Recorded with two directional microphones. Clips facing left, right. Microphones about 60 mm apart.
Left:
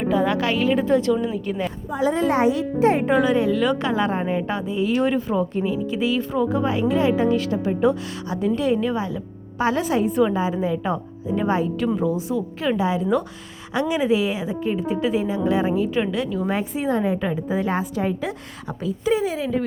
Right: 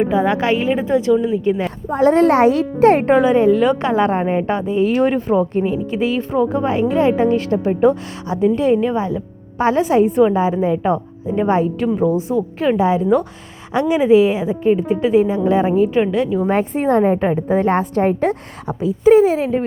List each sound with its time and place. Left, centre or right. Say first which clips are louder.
0.0 s a woman's voice: right 4 dB; right
1.9 s speech: right 8 dB; right
3.2 s a woman's voice: right 6 dB; right
16.6 s a woman's voice: right 8 dB; right
17.0 s a woman's voice: right 7 dB; right
18.7 s a woman's voice: right 10 dB; right